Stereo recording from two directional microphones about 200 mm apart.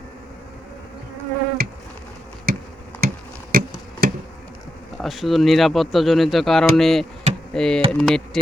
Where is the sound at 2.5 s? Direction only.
50° right (ahead or behind).